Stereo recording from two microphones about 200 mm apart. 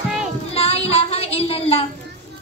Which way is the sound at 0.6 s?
30° left (ahead or behind).